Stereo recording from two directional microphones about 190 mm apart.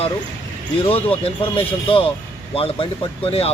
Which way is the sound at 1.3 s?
30° left (ahead or behind).